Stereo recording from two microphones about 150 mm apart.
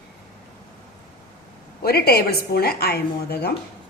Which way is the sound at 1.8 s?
90° left.